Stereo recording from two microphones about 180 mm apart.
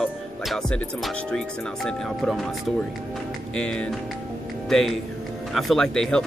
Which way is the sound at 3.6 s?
5° left (ahead or behind).